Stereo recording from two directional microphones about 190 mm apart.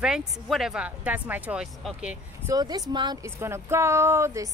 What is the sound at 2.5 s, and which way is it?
A woman's voice, 20° right (ahead or behind).